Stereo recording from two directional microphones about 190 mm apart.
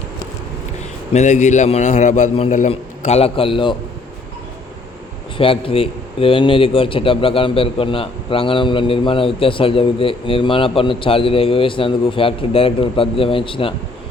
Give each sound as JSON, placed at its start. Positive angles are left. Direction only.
{"t": 1.1, "sound": "a man's voice", "side_deg": 40}
{"t": 5.4, "sound": "speech", "side_deg": 30}